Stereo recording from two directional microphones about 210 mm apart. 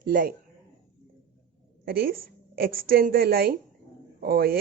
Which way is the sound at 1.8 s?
45° right (ahead or behind).